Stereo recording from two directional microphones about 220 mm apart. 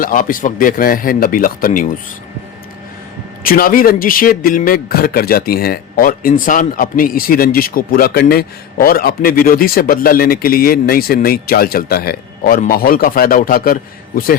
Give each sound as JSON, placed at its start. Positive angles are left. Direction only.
{"t": 0.0, "sound": "a man's voice", "side_deg": 40}
{"t": 3.4, "sound": "a man's voice", "side_deg": 40}